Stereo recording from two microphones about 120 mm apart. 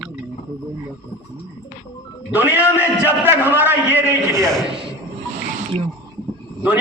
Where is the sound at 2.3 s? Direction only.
15° right (ahead or behind).